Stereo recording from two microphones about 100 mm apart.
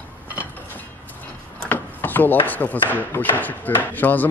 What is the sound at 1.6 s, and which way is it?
Wood, 20° left (ahead or behind).